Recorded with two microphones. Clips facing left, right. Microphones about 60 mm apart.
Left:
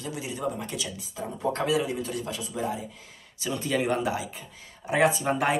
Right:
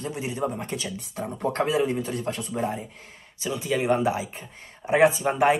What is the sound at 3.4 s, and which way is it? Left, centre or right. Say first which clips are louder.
Speech: right 2 dB; centre.